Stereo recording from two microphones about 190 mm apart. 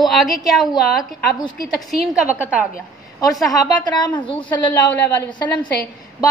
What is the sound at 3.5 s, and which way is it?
A woman's voice, 20° left (ahead or behind).